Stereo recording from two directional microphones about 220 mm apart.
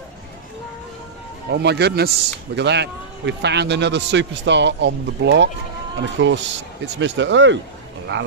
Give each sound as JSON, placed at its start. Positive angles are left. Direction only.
{"t": 1.5, "sound": "a man's voice", "side_deg": -50}